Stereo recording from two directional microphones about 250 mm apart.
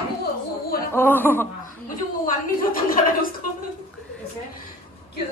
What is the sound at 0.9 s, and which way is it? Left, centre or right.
Speech, centre.